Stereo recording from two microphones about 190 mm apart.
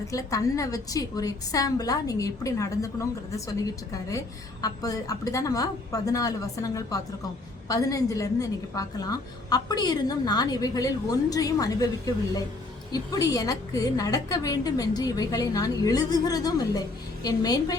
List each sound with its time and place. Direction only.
0.1 s a woman's voice: 15° left (ahead or behind)
4.6 s a woman's voice: 20° left (ahead or behind)